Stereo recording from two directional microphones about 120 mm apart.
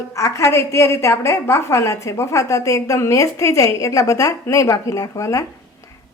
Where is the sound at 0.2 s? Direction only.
25° left (ahead or behind).